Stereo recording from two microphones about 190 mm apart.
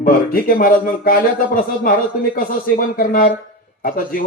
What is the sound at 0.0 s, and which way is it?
A man's voice, 50° left (ahead or behind).